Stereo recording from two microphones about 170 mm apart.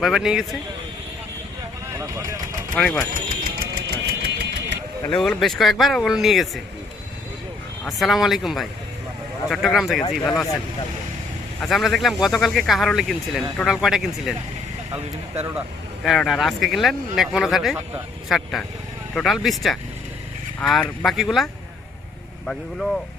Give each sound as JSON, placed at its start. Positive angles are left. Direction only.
{"t": 0.0, "sound": "speech", "side_deg": -5}
{"t": 2.0, "sound": "speech", "side_deg": -15}
{"t": 2.7, "sound": "speech", "side_deg": 5}
{"t": 3.6, "sound": "engine", "side_deg": -70}
{"t": 5.1, "sound": "speech", "side_deg": 5}
{"t": 7.9, "sound": "speech", "side_deg": 0}
{"t": 11.6, "sound": "speech", "side_deg": 0}
{"t": 15.4, "sound": "speech", "side_deg": -15}
{"t": 16.0, "sound": "speech", "side_deg": 0}